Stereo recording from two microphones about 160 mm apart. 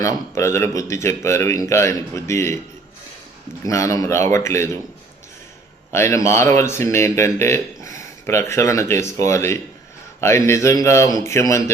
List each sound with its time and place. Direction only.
0.0 s speech: 15° left (ahead or behind)
3.7 s speech: 20° left (ahead or behind)
5.9 s speech: 15° left (ahead or behind)